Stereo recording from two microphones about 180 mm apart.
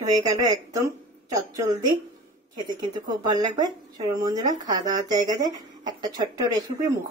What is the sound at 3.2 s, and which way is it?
Speech, 20° right (ahead or behind).